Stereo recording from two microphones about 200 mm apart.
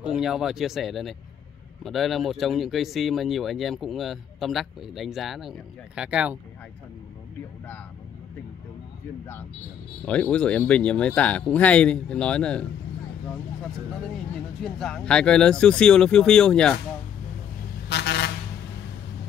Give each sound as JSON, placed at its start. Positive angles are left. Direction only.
{"t": 0.0, "sound": "speech", "side_deg": -5}
{"t": 10.0, "sound": "speech", "side_deg": 5}
{"t": 14.6, "sound": "speech", "side_deg": 0}
{"t": 17.8, "sound": "vehicle", "side_deg": 60}